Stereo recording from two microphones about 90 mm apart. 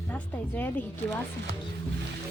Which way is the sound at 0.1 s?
20° left (ahead or behind).